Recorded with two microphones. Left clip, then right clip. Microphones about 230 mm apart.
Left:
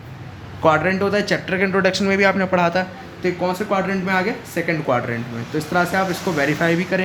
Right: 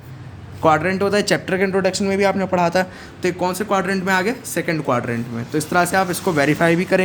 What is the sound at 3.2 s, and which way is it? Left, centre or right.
Speech, right.